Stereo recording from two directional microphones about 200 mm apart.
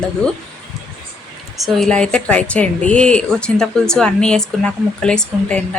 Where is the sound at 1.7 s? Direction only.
5° left (ahead or behind).